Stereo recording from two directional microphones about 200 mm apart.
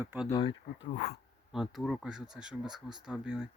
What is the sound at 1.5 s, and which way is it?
Speech, centre (ahead or behind).